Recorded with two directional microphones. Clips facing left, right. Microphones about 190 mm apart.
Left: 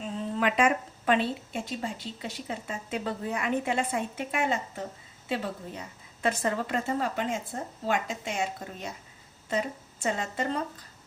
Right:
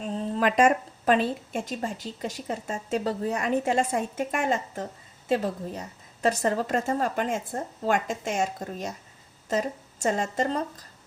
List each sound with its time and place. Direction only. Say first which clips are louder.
0.0 s a woman's voice: right 3 dB; 40° right (ahead or behind)